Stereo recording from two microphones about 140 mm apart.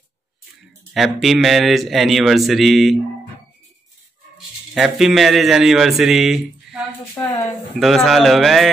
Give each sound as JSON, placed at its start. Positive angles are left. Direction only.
{"t": 0.9, "sound": "speech", "side_deg": 0}
{"t": 4.7, "sound": "speech", "side_deg": 0}
{"t": 7.2, "sound": "speech", "side_deg": 20}
{"t": 7.8, "sound": "speech", "side_deg": 0}